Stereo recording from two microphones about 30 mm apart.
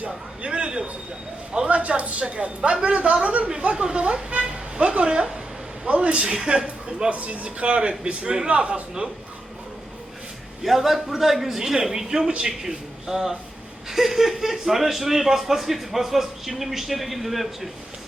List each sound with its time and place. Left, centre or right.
0.4 s a sound: right
1.6 s a sound: right
2.2 s a man's voice: right
3.8 s vehicle: right
5.9 s a man's voice: right
7.1 s speech: right
7.4 s a man's voice: right
10.6 s a man's voice: centre